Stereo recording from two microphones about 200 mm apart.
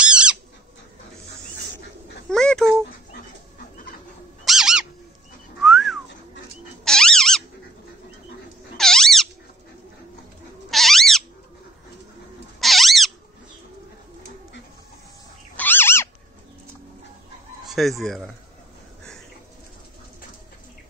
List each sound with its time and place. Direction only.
0.0 s bird: 5° right (ahead or behind)
2.2 s speech: 5° left (ahead or behind)
4.5 s bird: 5° right (ahead or behind)
5.6 s whistling: centre (ahead or behind)
6.8 s squeak: 5° left (ahead or behind)
8.7 s squeak: centre (ahead or behind)
10.7 s cat: centre (ahead or behind)
12.5 s cat: centre (ahead or behind)
15.5 s dog: 10° left (ahead or behind)
17.6 s fowl: centre (ahead or behind)